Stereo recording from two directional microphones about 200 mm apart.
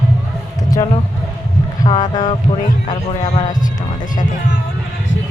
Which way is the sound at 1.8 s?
20° left (ahead or behind).